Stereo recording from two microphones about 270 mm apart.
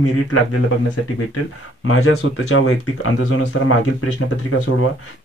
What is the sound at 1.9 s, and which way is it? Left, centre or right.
Speech, left.